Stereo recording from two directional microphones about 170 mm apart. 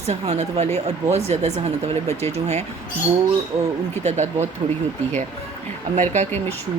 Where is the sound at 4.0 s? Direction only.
40° right (ahead or behind).